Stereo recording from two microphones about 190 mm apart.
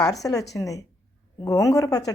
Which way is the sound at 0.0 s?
20° left (ahead or behind).